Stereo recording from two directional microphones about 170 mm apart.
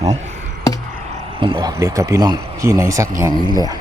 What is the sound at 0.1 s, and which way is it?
Speech, 40° right (ahead or behind).